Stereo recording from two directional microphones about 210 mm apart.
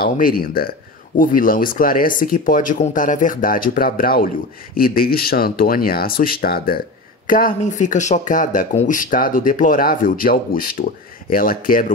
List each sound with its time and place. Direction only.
0.0 s speech: 45° left (ahead or behind)